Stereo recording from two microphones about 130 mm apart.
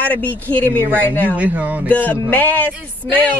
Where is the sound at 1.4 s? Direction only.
10° right (ahead or behind).